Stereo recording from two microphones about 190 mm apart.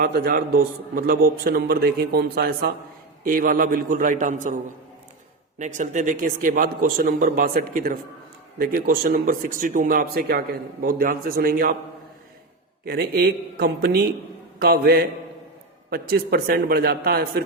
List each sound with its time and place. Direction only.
0.0 s a man's voice: 55° right (ahead or behind)
5.5 s speech: 40° right (ahead or behind)
12.8 s speech: 55° right (ahead or behind)